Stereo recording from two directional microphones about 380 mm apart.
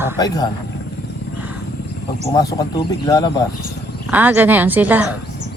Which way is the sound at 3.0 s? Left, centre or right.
Centre.